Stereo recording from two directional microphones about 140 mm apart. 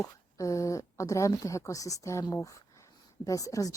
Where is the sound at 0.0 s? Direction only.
25° left (ahead or behind).